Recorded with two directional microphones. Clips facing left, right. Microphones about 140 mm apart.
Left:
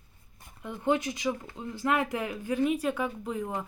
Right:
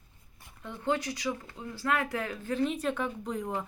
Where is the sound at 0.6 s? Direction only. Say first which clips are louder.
Left 3 dB; 15° left (ahead or behind).